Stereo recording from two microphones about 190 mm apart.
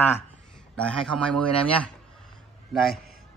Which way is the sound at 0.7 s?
5° left (ahead or behind).